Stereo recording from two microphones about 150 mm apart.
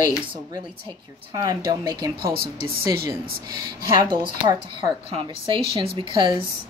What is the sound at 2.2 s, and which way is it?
Speech, 90° right.